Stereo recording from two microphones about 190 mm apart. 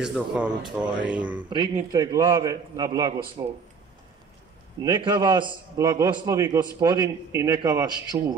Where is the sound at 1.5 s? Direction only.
20° right (ahead or behind).